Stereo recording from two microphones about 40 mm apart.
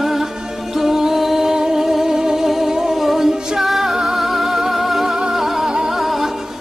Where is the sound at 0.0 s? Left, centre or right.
Centre.